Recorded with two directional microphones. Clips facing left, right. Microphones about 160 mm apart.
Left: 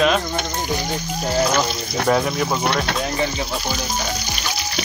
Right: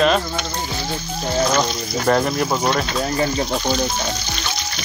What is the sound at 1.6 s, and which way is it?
Frying, 5° left (ahead or behind).